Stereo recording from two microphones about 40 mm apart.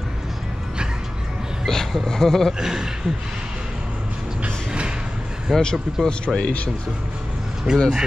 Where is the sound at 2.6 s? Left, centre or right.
Centre.